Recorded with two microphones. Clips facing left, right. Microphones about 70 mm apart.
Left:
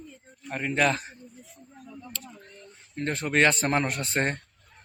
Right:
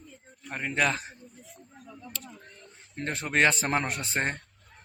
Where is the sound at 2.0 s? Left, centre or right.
Centre.